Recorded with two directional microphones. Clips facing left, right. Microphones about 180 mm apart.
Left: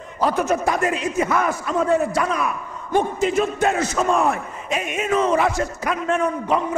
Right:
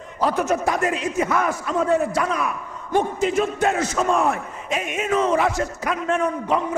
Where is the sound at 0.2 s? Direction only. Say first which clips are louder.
Left 1 dB; 15° left (ahead or behind).